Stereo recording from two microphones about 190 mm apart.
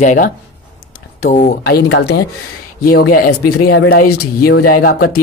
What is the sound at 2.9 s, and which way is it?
Speech, 50° left (ahead or behind).